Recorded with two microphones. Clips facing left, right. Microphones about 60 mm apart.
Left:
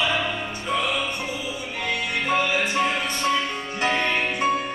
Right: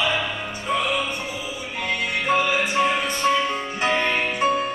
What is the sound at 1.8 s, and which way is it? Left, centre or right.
Music, right.